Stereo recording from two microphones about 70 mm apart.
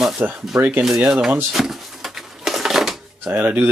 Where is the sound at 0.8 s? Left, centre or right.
Centre.